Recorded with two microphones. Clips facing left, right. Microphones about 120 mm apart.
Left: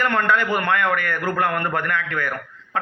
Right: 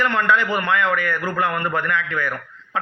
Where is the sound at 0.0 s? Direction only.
50° left (ahead or behind).